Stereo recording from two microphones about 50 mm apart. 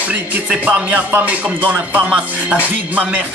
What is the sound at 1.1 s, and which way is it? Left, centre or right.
Music, right.